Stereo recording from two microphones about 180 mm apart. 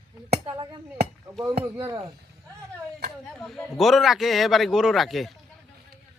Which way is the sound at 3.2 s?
Centre (ahead or behind).